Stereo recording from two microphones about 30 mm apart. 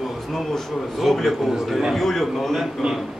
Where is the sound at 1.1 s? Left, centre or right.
Centre.